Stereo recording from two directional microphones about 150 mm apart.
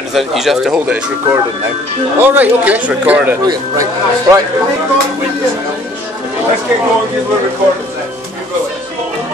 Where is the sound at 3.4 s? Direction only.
20° right (ahead or behind).